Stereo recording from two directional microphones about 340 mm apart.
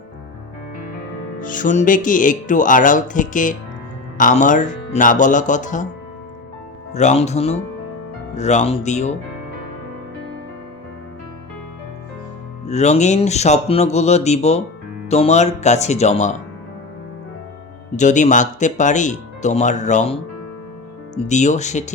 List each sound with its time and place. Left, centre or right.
1.4 s speech: left
6.9 s speech: centre
12.6 s speech: centre
17.9 s speech: left
21.2 s speech: left